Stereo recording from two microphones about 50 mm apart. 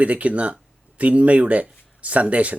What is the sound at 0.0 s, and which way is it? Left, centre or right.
A man's voice, right.